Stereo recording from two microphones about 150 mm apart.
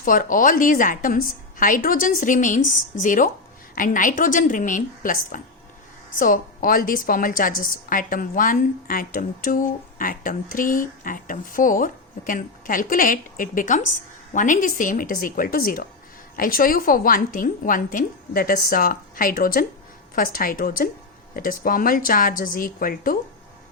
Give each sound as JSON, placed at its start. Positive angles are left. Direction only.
{"t": 0.0, "sound": "a woman's voice", "side_deg": 65}